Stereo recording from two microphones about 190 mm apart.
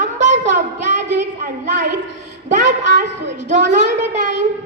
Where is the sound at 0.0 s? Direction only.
40° right (ahead or behind).